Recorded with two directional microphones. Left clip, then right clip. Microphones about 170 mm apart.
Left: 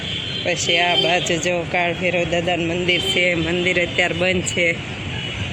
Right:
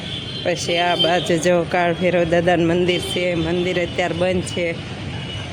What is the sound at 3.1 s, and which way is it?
Speech, 5° right (ahead or behind).